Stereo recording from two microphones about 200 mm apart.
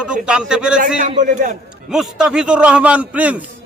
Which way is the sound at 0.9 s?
40° right (ahead or behind).